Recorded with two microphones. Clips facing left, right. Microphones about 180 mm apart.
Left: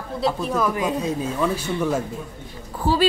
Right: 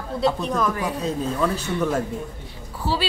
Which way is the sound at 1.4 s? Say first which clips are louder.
Left 1 dB; 10° left (ahead or behind).